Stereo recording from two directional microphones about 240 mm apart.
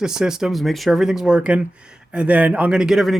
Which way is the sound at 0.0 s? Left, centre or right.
Centre.